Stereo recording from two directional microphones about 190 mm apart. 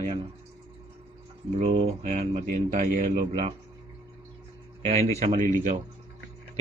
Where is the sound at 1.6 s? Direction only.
40° right (ahead or behind).